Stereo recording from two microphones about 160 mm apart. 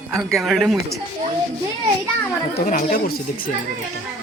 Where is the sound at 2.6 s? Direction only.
60° left (ahead or behind).